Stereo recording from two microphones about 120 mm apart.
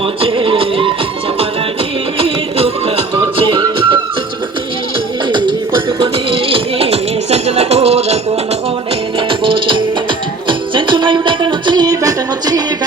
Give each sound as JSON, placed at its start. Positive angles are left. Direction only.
{"t": 0.2, "sound": "music", "side_deg": -50}
{"t": 2.1, "sound": "music", "side_deg": -55}
{"t": 5.3, "sound": "music", "side_deg": -40}
{"t": 9.1, "sound": "music", "side_deg": -45}